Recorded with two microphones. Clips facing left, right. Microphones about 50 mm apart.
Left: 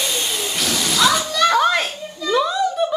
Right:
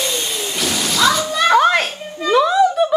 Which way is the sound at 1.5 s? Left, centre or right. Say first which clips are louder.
Right 4 dB; right.